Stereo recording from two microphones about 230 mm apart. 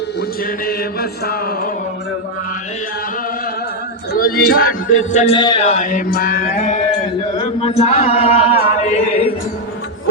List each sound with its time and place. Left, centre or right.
0.2 s chant: left
4.1 s chant: left